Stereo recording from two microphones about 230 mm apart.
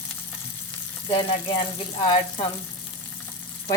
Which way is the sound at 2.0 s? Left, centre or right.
Centre.